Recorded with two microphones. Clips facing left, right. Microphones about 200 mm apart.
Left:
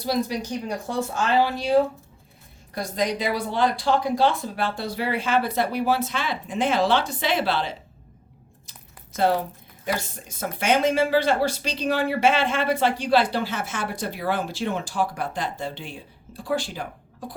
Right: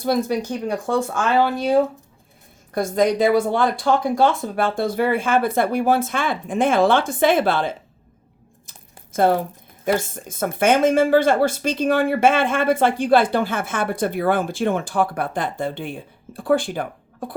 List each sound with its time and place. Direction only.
0.0 s speech: 50° right (ahead or behind)
2.7 s speech: 50° right (ahead or behind)
9.1 s speech: 50° right (ahead or behind)